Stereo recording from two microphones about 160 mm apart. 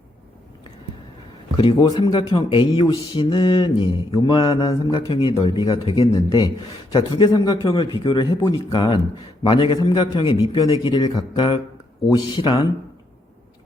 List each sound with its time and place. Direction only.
1.7 s a man's voice: 25° left (ahead or behind)
6.1 s a man's voice: 25° left (ahead or behind)